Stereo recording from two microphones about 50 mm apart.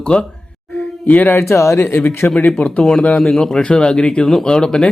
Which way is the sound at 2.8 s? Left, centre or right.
Centre.